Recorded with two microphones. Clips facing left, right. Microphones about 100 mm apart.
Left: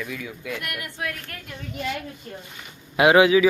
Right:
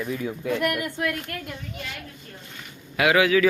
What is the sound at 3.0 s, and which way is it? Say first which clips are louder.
Speech: left 4 dB; 25° left (ahead or behind).